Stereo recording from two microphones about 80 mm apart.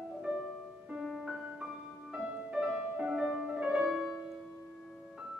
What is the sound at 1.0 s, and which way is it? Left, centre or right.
Piano, centre.